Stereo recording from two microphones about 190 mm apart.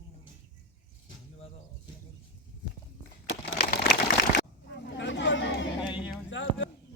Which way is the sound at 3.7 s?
55° left (ahead or behind).